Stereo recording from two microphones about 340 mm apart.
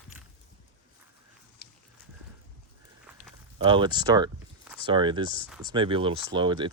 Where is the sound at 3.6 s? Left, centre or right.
Centre.